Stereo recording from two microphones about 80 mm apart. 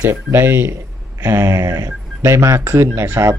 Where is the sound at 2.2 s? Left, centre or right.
Right.